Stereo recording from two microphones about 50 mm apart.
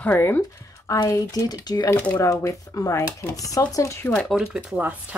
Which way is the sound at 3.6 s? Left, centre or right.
Left.